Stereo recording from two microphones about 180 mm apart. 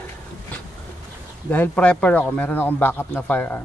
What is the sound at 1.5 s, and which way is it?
A man's voice, 10° left (ahead or behind).